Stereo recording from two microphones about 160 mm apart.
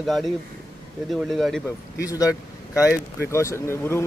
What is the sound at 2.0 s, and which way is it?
Speech, 20° left (ahead or behind).